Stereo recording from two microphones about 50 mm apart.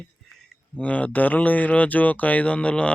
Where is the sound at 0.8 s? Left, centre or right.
Left.